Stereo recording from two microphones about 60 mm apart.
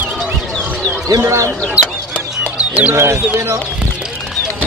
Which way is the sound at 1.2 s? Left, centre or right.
Right.